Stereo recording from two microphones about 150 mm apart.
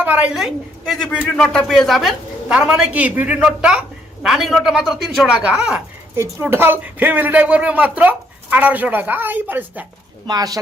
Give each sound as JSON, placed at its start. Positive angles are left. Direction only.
{"t": 0.0, "sound": "a man's voice", "side_deg": -10}
{"t": 10.2, "sound": "speech", "side_deg": -25}